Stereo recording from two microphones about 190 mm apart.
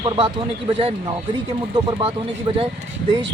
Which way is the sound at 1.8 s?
25° right (ahead or behind).